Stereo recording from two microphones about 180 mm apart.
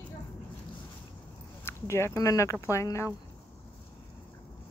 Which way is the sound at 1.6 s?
15° left (ahead or behind).